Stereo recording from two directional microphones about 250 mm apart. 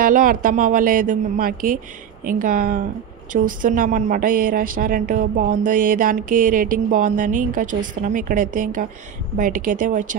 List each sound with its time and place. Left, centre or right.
0.0 s a woman's voice: right